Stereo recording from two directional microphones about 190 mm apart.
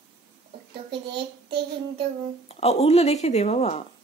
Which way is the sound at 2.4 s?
30° left (ahead or behind).